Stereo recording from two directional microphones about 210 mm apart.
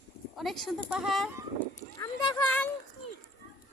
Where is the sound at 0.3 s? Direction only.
Centre (ahead or behind).